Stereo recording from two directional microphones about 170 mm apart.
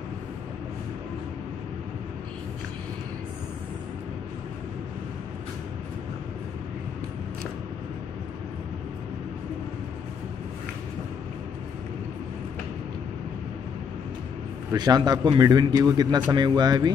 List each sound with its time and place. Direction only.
14.7 s a man's voice: 25° right (ahead or behind)